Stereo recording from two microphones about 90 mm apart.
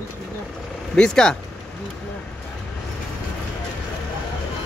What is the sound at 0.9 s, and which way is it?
Speech, 10° left (ahead or behind).